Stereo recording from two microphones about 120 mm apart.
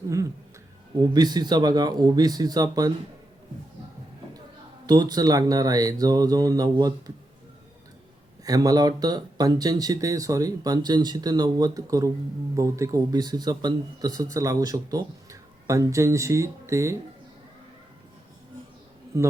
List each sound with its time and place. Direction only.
1.1 s speech: 35° right (ahead or behind)
4.9 s speech: 35° right (ahead or behind)
8.4 s speech: 30° right (ahead or behind)